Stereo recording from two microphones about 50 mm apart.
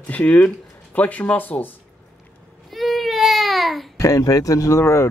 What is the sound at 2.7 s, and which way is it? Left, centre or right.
Baby cry, centre.